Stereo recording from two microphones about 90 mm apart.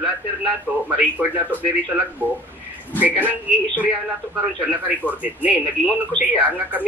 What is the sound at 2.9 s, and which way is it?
Speech, 20° right (ahead or behind).